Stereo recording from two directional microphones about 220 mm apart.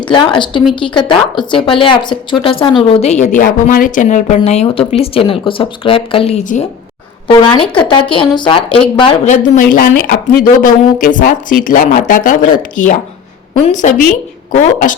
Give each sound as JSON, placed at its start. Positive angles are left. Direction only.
{"t": 0.1, "sound": "a woman's voice", "side_deg": 20}
{"t": 13.7, "sound": "speech", "side_deg": 35}